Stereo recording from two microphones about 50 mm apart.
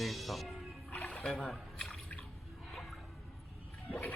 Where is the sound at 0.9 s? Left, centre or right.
Left.